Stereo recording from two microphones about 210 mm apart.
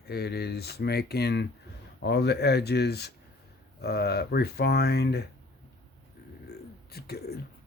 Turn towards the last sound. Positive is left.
turn(degrees=50)  # may be behind; listen again after turning